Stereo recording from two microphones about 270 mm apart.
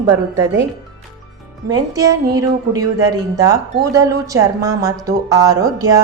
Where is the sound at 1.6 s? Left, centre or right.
Centre.